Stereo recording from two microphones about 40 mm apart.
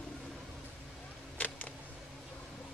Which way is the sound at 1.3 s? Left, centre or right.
Left.